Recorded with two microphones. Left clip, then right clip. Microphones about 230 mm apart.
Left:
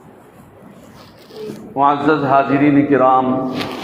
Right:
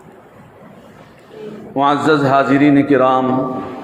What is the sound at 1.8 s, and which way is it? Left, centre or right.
A man's voice, right.